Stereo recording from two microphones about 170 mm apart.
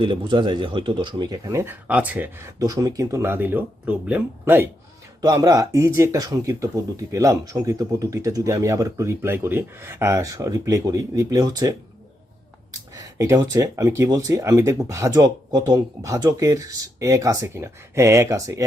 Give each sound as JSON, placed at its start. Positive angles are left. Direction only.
{"t": 0.0, "sound": "speech", "side_deg": -30}
{"t": 12.9, "sound": "speech", "side_deg": -20}